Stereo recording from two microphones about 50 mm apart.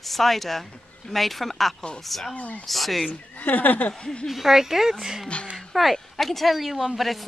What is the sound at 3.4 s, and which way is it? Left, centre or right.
Speech, left.